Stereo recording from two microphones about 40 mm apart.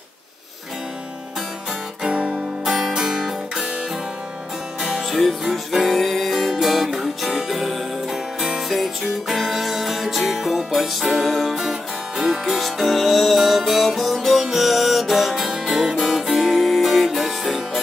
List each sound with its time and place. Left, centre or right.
2.0 s guitar: right
2.7 s music: centre
4.8 s music: centre
16.6 s music: centre